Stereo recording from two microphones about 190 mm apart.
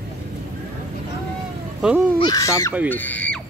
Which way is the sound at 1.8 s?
5° right (ahead or behind).